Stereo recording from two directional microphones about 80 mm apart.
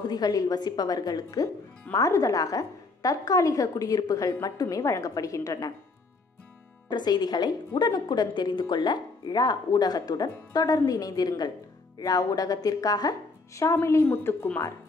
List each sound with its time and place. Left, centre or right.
0.0 s a woman's voice: left
1.9 s a woman's voice: left
6.9 s a woman's voice: left
13.6 s a woman's voice: left